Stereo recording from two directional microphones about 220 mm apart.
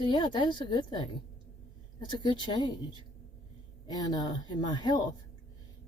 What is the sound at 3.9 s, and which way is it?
Speech, 20° left (ahead or behind).